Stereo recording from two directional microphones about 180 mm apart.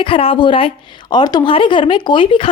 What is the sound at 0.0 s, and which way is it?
Speech, 30° left (ahead or behind).